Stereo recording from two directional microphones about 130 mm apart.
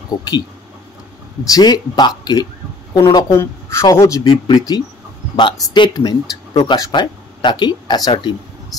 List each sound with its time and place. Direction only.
1.5 s speech: 35° left (ahead or behind)